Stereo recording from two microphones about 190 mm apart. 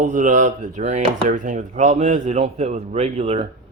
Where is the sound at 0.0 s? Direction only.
40° right (ahead or behind).